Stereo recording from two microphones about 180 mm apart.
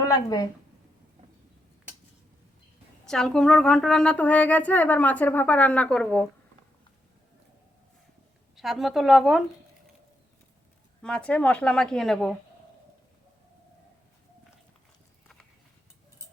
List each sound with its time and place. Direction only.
0.0 s a woman's voice: 20° left (ahead or behind)
3.1 s a woman's voice: 5° left (ahead or behind)
8.5 s speech: centre (ahead or behind)
11.0 s speech: 5° left (ahead or behind)